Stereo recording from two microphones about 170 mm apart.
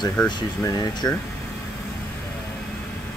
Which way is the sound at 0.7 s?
20° left (ahead or behind).